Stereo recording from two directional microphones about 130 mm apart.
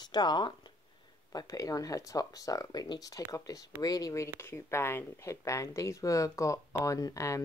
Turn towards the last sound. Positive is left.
turn(degrees=25)  # may be behind; listen again after turning